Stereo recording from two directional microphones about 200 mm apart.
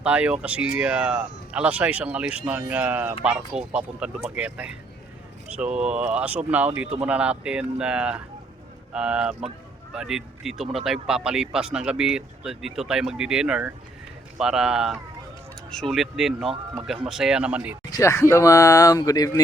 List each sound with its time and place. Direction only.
0.0 s speech: 5° right (ahead or behind)
17.9 s speech: 15° left (ahead or behind)